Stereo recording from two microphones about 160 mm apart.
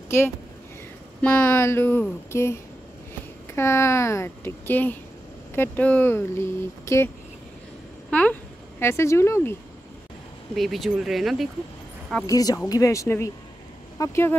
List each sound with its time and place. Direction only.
0.1 s a woman's voice: 15° left (ahead or behind)
8.1 s speech: 10° left (ahead or behind)
10.5 s speech: centre (ahead or behind)
12.3 s a woman's voice: 20° left (ahead or behind)